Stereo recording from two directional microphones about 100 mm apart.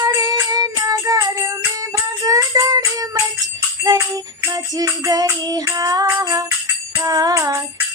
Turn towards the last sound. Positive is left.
turn(degrees=-40)  # may be behind; listen again after turning